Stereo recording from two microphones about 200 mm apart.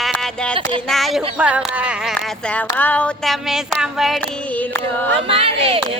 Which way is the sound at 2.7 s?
10° left (ahead or behind).